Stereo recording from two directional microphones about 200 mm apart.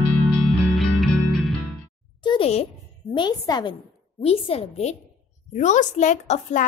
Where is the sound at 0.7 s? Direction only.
Centre (ahead or behind).